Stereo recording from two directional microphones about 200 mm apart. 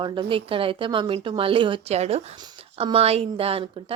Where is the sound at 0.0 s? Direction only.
25° right (ahead or behind).